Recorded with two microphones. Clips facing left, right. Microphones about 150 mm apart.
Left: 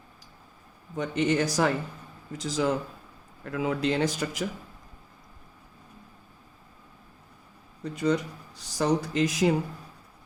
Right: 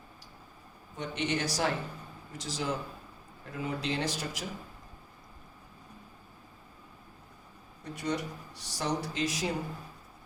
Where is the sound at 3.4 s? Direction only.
90° left.